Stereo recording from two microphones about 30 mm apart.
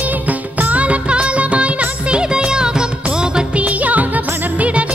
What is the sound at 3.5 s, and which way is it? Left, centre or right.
Music, right.